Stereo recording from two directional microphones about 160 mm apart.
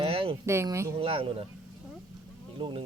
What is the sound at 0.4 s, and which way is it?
Speech, 15° right (ahead or behind).